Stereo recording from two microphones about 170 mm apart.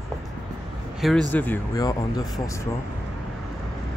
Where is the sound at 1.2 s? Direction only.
10° left (ahead or behind).